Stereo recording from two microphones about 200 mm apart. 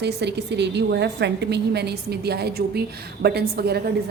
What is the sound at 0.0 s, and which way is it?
A woman's voice, 55° right (ahead or behind).